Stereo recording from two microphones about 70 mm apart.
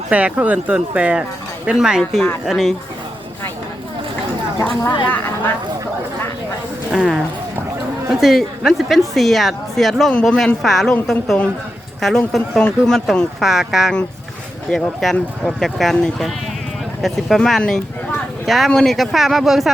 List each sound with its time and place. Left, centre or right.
0.1 s speech: right; by 2.7 s centre
4.9 s speech: left
6.9 s speech: centre
8.2 s speech: centre
13.4 s speech: centre
17.0 s speech: centre